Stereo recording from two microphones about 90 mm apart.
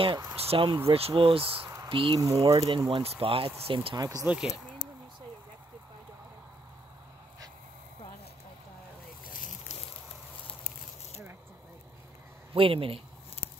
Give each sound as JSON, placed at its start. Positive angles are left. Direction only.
{"t": 0.4, "sound": "speech", "side_deg": -85}
{"t": 1.9, "sound": "speech", "side_deg": -75}
{"t": 2.2, "sound": "speech", "side_deg": -40}
{"t": 2.5, "sound": "speech", "side_deg": -90}
{"t": 3.9, "sound": "speech", "side_deg": -45}
{"t": 12.5, "sound": "speech", "side_deg": -90}